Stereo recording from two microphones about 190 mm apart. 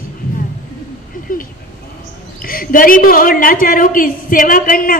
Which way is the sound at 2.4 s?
50° left (ahead or behind).